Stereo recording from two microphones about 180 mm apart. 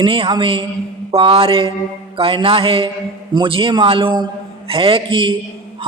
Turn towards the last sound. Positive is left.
turn(degrees=-30)  # may be behind; listen again after turning